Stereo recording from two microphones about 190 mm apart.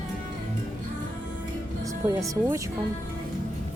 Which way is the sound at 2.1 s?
15° right (ahead or behind).